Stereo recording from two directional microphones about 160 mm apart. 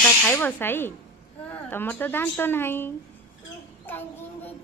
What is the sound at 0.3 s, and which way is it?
Speech, 10° left (ahead or behind).